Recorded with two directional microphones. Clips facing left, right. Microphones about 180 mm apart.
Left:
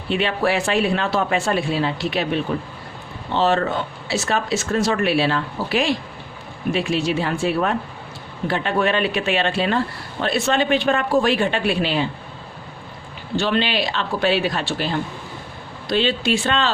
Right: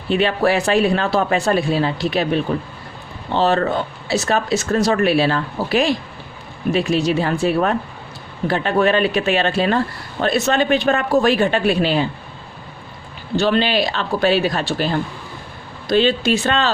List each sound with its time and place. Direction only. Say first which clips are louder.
0.1 s speech: right 4 dB; 40° right (ahead or behind)
13.3 s speech: right 4 dB; 40° right (ahead or behind)